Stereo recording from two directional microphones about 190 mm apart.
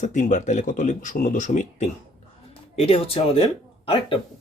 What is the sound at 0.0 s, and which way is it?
Speech, 40° left (ahead or behind).